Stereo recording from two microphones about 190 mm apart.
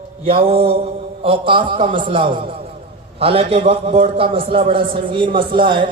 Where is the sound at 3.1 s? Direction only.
30° right (ahead or behind).